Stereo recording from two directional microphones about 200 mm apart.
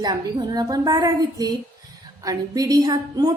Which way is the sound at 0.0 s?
20° right (ahead or behind).